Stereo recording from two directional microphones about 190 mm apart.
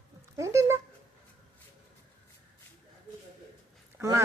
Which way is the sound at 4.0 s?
15° right (ahead or behind).